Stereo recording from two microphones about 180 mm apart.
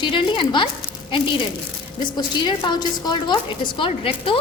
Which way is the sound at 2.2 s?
25° left (ahead or behind).